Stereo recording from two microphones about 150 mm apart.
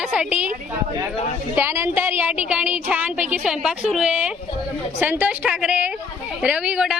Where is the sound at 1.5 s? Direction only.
15° right (ahead or behind).